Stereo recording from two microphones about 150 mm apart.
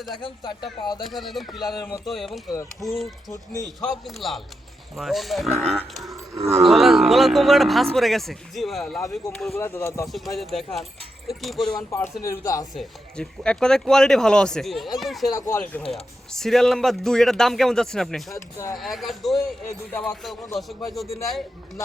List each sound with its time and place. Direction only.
0.2 s speech: 30° left (ahead or behind)
1.1 s speech: centre (ahead or behind)
1.7 s speech: 25° left (ahead or behind)
2.0 s speech: centre (ahead or behind)
5.7 s a sound: centre (ahead or behind)
6.6 s speech: centre (ahead or behind)
9.6 s speech: 15° left (ahead or behind)
10.3 s speech: centre (ahead or behind)
11.9 s speech: 15° left (ahead or behind)
12.7 s speech: 5° left (ahead or behind)
15.4 s speech: 15° left (ahead or behind); by 21.1 s centre (ahead or behind)